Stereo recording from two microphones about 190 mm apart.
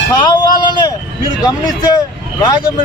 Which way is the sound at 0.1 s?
25° left (ahead or behind).